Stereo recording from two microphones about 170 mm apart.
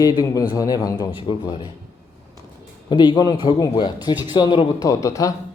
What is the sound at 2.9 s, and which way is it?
Speech, 25° left (ahead or behind).